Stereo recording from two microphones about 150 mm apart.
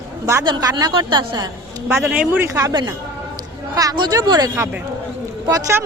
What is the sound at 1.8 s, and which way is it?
A man's voice, 10° right (ahead or behind).